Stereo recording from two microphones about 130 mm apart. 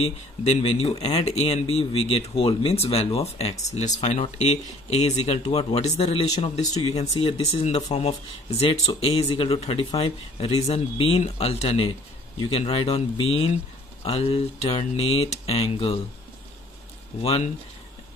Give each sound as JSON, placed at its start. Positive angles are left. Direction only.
{"t": 0.0, "sound": "speech", "side_deg": 55}